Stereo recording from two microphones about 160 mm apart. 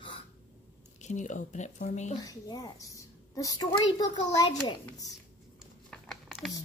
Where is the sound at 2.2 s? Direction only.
25° left (ahead or behind).